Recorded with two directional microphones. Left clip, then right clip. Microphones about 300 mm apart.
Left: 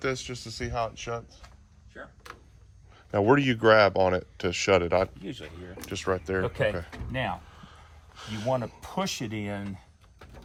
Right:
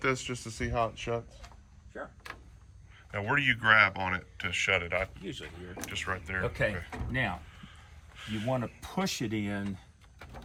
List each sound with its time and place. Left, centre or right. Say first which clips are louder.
0.0 s speech: even; centre
2.9 s speech: left 8 dB; centre
5.2 s speech: left 2 dB; left
5.9 s speech: left 6 dB; centre
7.1 s a sound: left 1 dB; centre
8.5 s speech: left 4 dB; centre